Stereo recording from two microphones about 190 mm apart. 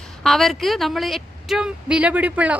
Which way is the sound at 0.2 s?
Centre (ahead or behind).